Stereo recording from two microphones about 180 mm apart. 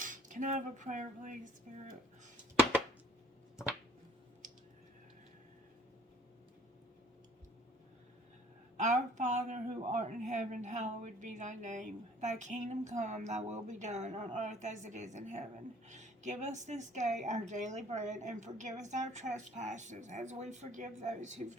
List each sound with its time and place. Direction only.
0.0 s cutlery: 45° right (ahead or behind)
8.8 s a woman's voice: 40° right (ahead or behind)